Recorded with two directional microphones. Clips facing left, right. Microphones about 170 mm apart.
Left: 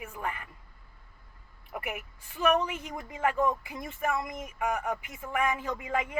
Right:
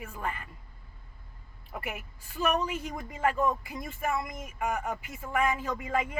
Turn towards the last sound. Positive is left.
turn(degrees=15)  # may be behind; listen again after turning